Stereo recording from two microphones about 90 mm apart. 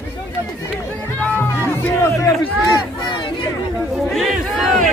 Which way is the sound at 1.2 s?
25° left (ahead or behind).